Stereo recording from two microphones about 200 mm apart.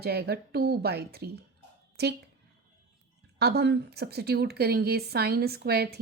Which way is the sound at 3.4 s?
55° right (ahead or behind).